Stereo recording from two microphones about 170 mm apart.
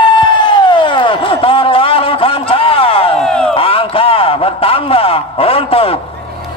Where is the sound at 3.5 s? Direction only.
30° left (ahead or behind).